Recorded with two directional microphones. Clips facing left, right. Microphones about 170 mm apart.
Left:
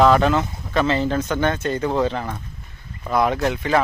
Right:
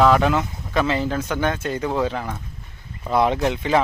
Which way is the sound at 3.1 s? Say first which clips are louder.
Even; 20° right (ahead or behind).